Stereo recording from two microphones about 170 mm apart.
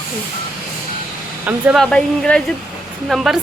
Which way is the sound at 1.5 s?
10° right (ahead or behind).